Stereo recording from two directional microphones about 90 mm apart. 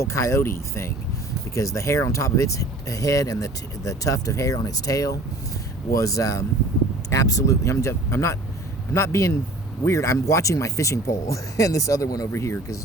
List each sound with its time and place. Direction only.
0.0 s speech: 30° left (ahead or behind)